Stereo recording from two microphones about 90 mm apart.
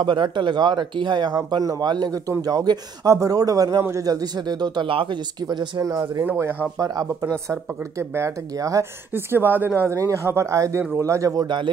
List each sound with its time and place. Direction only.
0.0 s speech: 65° right (ahead or behind)
3.1 s speech: 40° right (ahead or behind)
5.8 s speech: 40° right (ahead or behind)
6.2 s speech: 25° right (ahead or behind)
6.8 s speech: 40° right (ahead or behind)
8.0 s speech: 30° right (ahead or behind)
9.1 s speech: 25° right (ahead or behind)
9.9 s speech: 40° right (ahead or behind)
11.4 s speech: 60° right (ahead or behind)